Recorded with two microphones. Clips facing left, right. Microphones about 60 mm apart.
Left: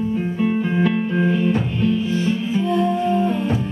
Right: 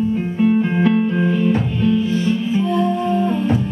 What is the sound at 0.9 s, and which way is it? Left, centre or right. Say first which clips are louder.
Music: right 2 dB; centre.